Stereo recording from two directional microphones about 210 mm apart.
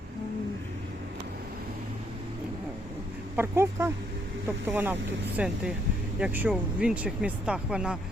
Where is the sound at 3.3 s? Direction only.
10° right (ahead or behind).